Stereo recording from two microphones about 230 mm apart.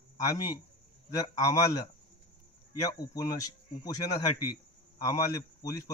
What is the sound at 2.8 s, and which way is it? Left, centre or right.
A man's voice, centre.